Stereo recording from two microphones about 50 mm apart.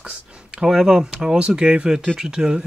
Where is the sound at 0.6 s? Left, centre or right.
Centre.